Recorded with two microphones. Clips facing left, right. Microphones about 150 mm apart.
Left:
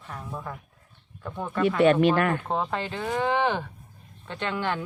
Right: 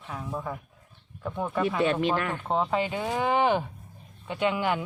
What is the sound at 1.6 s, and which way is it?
Speech, 60° left (ahead or behind).